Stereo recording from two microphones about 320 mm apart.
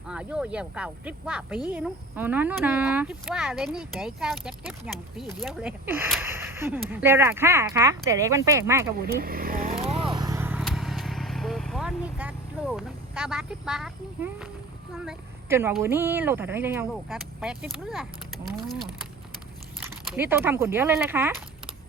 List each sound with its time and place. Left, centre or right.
0.1 s speech: centre
9.0 s vehicle: right; by 14.5 s centre
14.9 s speech: centre